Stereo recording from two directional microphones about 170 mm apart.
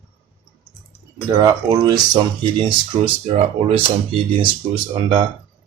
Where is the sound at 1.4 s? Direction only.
20° right (ahead or behind).